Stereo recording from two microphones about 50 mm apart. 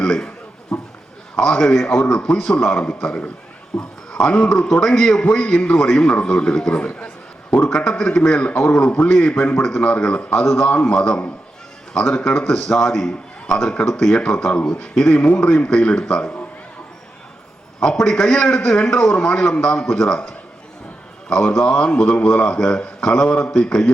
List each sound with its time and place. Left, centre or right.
0.0 s a sound: centre
0.7 s a man's voice: centre
18.1 s a man's voice: centre
21.6 s a man's voice: centre